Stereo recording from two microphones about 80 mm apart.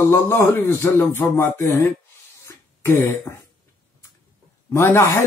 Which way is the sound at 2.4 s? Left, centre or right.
Left.